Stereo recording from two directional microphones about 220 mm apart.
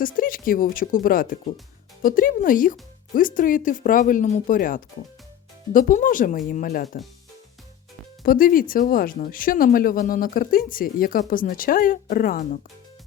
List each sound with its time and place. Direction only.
0.0 s speech: 40° left (ahead or behind)
8.2 s speech: 40° left (ahead or behind)